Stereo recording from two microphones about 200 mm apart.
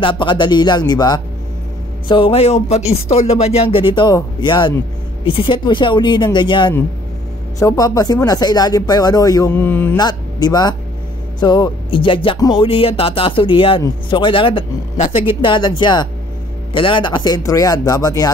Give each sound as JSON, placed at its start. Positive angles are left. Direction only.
{"t": 0.0, "sound": "speech", "side_deg": 25}